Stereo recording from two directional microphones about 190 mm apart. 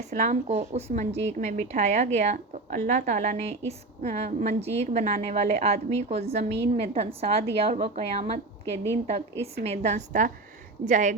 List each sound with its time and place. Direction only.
0.1 s speech: 40° right (ahead or behind)